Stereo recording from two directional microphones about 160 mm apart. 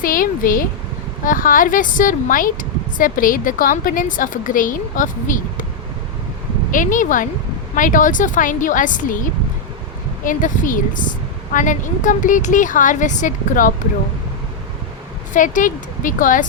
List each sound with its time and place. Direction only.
0.0 s a woman's voice: 60° left (ahead or behind)
6.7 s a woman's voice: 55° left (ahead or behind)
10.2 s a woman's voice: 55° left (ahead or behind)
15.3 s a woman's voice: 55° left (ahead or behind)